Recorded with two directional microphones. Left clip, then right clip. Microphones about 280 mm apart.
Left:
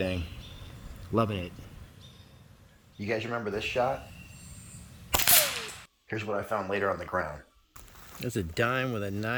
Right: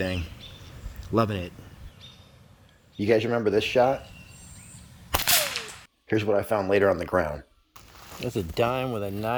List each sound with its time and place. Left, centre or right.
1.1 s speech: right
3.0 s speech: right
5.1 s machine gun: centre
6.1 s speech: right
8.2 s speech: centre